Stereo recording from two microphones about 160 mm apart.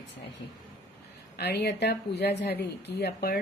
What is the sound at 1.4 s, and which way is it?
A woman's voice, 90° left.